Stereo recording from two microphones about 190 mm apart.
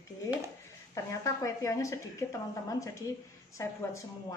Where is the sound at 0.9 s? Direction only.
15° left (ahead or behind).